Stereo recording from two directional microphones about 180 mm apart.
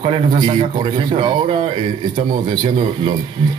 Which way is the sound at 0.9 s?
30° right (ahead or behind).